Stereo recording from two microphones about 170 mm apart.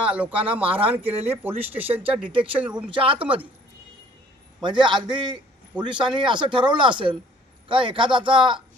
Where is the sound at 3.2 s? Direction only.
10° right (ahead or behind).